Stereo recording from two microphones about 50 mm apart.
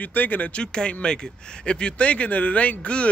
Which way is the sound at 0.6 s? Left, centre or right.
Centre.